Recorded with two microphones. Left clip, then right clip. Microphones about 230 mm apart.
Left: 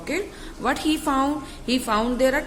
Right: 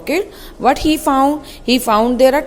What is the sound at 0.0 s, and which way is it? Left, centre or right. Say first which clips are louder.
A woman's voice: right 9 dB; right.